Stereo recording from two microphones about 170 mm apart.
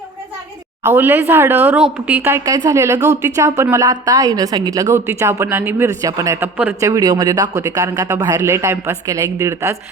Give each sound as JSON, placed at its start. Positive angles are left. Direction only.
{"t": 0.9, "sound": "a woman's voice", "side_deg": -10}